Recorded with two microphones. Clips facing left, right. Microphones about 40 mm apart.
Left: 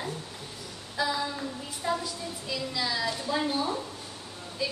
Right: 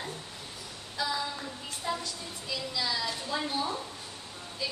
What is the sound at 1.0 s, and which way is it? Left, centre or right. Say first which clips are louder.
A woman's voice: left 3 dB; centre.